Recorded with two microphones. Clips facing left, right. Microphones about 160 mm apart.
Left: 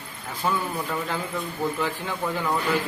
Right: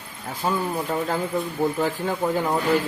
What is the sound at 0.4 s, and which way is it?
Speech, 35° right (ahead or behind).